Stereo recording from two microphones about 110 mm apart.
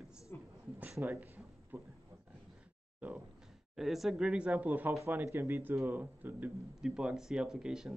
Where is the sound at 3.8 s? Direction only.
Centre (ahead or behind).